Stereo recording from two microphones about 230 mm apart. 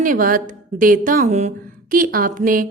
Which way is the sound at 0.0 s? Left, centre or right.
Right.